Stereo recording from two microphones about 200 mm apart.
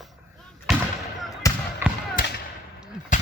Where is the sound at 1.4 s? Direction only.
15° left (ahead or behind).